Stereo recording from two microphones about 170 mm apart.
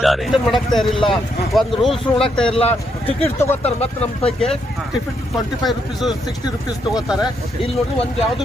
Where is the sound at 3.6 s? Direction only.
35° left (ahead or behind).